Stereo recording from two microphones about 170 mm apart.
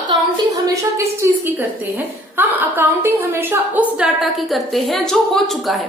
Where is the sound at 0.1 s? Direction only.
20° right (ahead or behind); by 5.9 s centre (ahead or behind).